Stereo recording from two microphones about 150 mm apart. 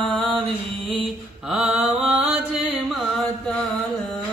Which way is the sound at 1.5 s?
5° right (ahead or behind).